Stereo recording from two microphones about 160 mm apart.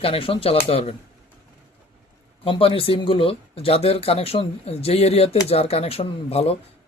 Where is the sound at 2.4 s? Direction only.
35° left (ahead or behind).